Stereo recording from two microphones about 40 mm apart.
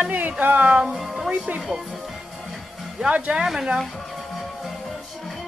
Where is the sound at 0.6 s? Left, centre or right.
Right.